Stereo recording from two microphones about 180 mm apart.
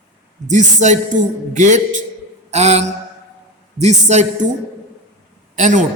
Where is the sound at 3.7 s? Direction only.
40° right (ahead or behind).